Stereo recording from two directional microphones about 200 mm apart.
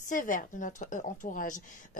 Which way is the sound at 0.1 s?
40° left (ahead or behind).